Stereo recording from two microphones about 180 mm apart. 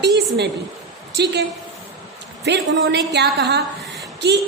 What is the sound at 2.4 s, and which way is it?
A woman's voice, 65° right (ahead or behind).